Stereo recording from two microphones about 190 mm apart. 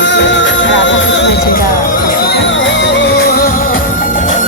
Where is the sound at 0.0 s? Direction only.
65° left (ahead or behind).